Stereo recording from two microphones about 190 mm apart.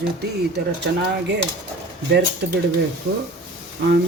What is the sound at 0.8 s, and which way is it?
Speech, 65° right (ahead or behind).